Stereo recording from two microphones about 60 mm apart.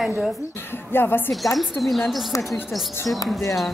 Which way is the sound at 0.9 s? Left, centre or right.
Left.